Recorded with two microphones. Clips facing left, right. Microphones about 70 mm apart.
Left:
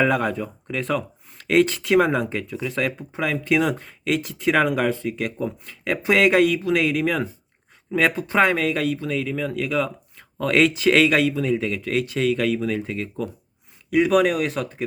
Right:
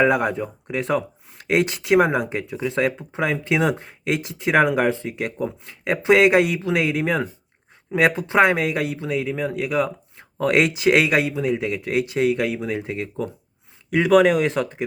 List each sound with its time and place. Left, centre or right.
0.0 s speech: centre
9.3 s speech: right
9.6 s speech: centre